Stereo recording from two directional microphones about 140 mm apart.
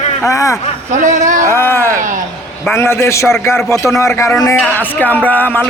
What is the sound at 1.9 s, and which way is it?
Speech, 70° right (ahead or behind).